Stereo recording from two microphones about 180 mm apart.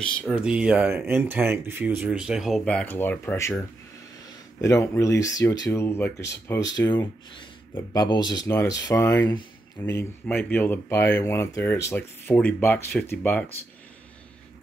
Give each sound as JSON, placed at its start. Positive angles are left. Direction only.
{"t": 0.2, "sound": "speech", "side_deg": -5}
{"t": 4.6, "sound": "speech", "side_deg": 15}